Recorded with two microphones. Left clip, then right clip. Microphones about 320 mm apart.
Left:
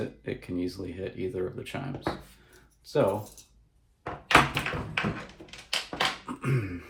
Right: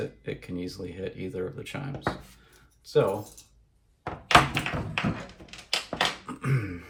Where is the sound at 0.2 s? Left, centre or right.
Centre.